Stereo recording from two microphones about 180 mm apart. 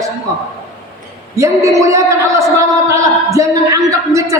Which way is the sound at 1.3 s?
15° right (ahead or behind).